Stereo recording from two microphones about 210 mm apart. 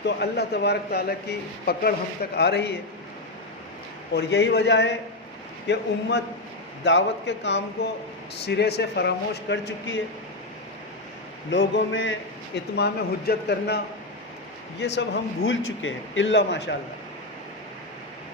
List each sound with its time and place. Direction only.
0.0 s a man's voice: 50° left (ahead or behind)
4.1 s a man's voice: 50° left (ahead or behind)
11.5 s a man's voice: 60° left (ahead or behind)
12.7 s a man's voice: 50° left (ahead or behind)